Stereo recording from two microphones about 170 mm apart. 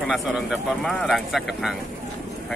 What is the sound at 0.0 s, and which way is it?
Speech, 5° right (ahead or behind).